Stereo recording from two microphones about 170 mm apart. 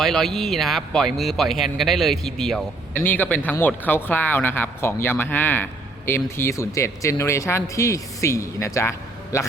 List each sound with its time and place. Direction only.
0.0 s speech: centre (ahead or behind)